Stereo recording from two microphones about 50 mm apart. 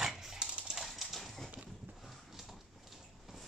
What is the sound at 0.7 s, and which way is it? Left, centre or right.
Clip-clop, centre.